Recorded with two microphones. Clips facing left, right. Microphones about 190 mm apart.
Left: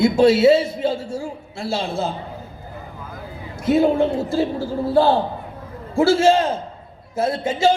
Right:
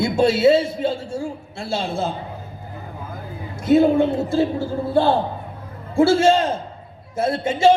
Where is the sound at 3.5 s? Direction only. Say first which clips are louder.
Right 2 dB; 25° right (ahead or behind).